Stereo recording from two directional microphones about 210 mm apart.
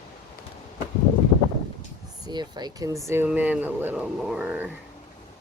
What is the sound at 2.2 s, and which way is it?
Speech, 20° right (ahead or behind).